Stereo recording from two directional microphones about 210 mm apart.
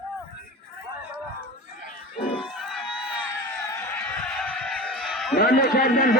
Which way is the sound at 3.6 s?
10° left (ahead or behind).